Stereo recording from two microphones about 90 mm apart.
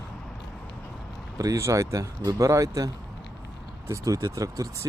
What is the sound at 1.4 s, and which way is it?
Speech, 35° right (ahead or behind).